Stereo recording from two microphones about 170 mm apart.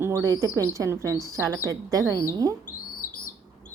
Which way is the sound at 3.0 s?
15° right (ahead or behind).